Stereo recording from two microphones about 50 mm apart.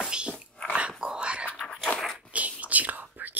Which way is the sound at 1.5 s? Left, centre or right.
Centre.